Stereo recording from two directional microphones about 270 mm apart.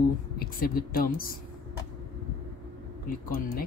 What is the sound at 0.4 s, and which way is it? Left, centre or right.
Speech, left.